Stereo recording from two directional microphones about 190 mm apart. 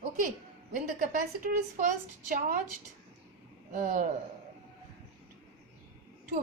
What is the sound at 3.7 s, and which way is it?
Speech, 45° right (ahead or behind).